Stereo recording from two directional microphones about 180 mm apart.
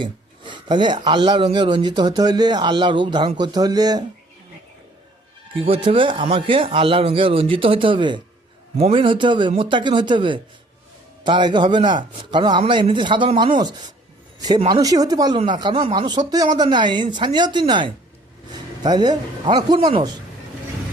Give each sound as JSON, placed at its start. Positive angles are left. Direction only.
{"t": 0.0, "sound": "speech", "side_deg": -25}
{"t": 5.5, "sound": "speech", "side_deg": -30}